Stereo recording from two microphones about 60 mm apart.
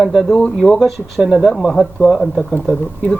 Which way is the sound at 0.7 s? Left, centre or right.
Centre.